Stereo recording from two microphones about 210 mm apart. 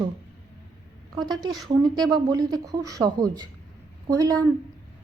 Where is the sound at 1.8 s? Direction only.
20° right (ahead or behind).